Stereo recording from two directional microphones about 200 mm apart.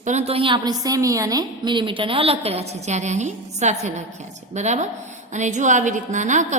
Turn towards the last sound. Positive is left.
turn(degrees=-40)  # may be behind; listen again after turning